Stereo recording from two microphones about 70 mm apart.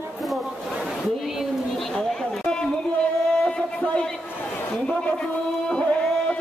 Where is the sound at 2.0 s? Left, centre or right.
Centre.